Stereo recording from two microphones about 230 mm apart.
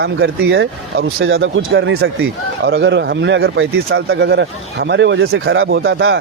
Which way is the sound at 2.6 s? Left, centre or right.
Right.